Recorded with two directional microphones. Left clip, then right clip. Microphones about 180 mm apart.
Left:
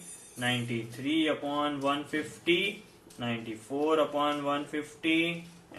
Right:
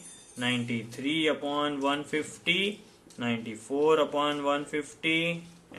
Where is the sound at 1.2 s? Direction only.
60° right (ahead or behind).